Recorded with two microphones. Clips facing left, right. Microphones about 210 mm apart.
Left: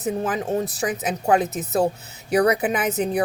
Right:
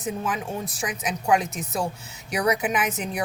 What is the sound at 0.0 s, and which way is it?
A woman's voice, 40° left (ahead or behind).